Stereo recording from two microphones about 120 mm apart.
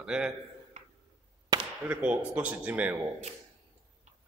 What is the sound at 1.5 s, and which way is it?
Chop, 30° right (ahead or behind).